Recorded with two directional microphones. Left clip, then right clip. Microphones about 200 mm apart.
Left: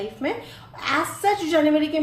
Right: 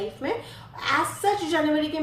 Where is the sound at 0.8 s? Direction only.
35° left (ahead or behind).